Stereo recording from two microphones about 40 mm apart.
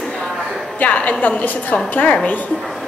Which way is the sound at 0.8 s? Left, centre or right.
Left.